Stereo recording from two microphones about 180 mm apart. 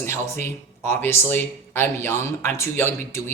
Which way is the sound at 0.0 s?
15° left (ahead or behind).